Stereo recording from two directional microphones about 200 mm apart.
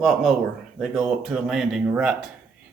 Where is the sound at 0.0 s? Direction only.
Centre (ahead or behind).